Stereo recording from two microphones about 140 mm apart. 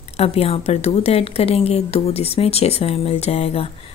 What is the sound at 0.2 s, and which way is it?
A woman's voice, 45° left (ahead or behind).